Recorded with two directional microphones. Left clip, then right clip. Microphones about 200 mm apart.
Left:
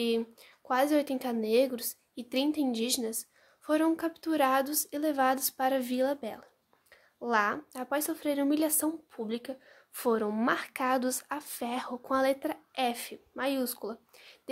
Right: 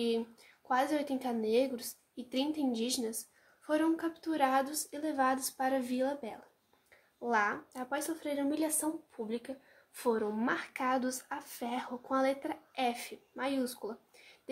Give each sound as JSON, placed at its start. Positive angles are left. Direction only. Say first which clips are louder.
{"t": 0.0, "sound": "a woman's voice", "louder": "left 3 dB", "side_deg": 45}